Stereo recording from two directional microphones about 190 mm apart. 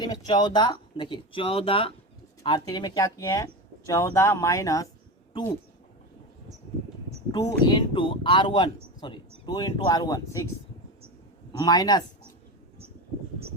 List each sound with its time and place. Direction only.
0.0 s speech: 20° left (ahead or behind)
7.3 s speech: 25° left (ahead or behind)
11.6 s speech: 20° left (ahead or behind)